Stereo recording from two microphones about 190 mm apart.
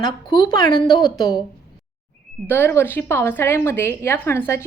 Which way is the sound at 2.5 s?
10° left (ahead or behind).